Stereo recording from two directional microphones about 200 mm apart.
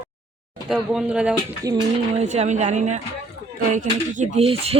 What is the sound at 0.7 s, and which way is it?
Speech, 5° right (ahead or behind).